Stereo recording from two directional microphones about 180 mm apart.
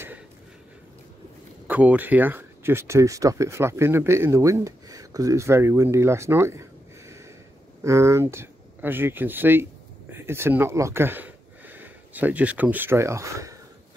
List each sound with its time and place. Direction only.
1.7 s speech: 10° right (ahead or behind)